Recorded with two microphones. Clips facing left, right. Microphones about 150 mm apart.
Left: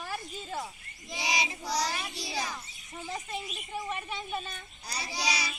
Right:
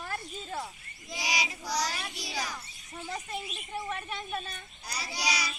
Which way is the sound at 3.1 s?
Centre (ahead or behind).